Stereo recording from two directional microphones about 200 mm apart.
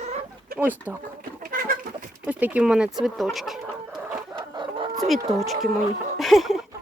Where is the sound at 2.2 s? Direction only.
5° right (ahead or behind).